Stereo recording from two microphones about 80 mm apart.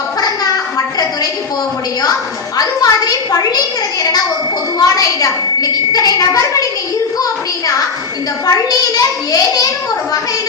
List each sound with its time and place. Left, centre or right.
0.2 s a sound: left
2.6 s a woman's voice: left
4.8 s a woman's voice: left
8.4 s a woman's voice: left